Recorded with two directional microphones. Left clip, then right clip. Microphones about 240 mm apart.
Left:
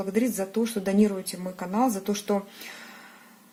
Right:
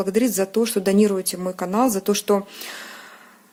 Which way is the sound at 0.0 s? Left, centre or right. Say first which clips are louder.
Right 7 dB; right.